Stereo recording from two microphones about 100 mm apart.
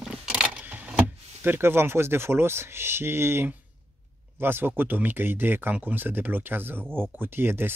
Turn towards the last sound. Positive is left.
turn(degrees=-20)  # may be behind; listen again after turning